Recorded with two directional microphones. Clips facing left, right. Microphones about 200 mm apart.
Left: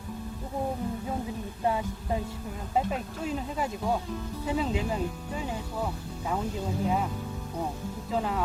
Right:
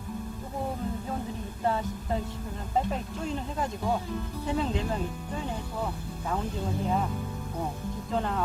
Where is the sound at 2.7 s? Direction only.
5° left (ahead or behind).